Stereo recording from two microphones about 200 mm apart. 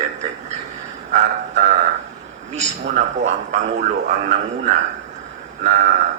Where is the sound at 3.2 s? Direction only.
35° right (ahead or behind).